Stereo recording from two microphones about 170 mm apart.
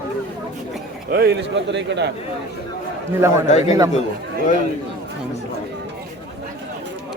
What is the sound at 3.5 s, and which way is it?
Speech, 40° left (ahead or behind).